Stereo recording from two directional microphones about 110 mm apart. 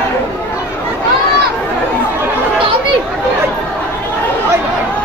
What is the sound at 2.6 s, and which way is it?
Chatter, 50° right (ahead or behind).